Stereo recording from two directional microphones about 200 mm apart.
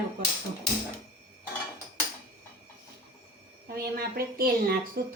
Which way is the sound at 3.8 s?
50° right (ahead or behind).